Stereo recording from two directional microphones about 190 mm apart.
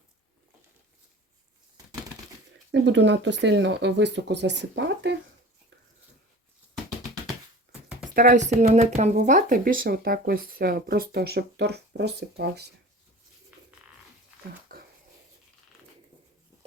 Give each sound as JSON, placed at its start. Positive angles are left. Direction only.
{"t": 2.8, "sound": "speech", "side_deg": -70}
{"t": 8.1, "sound": "speech", "side_deg": -50}
{"t": 8.6, "sound": "speech", "side_deg": -35}
{"t": 14.7, "sound": "a sound", "side_deg": -50}